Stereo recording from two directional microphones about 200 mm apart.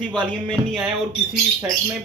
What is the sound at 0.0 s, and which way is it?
Speech, 20° right (ahead or behind).